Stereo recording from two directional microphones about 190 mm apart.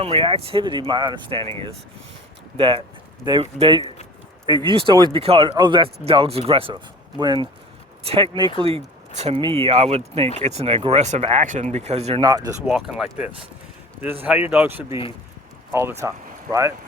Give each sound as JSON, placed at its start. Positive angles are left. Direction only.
{"t": 0.0, "sound": "speech", "side_deg": -30}
{"t": 2.6, "sound": "speech", "side_deg": -25}
{"t": 12.2, "sound": "speech", "side_deg": -20}
{"t": 12.6, "sound": "speech", "side_deg": 0}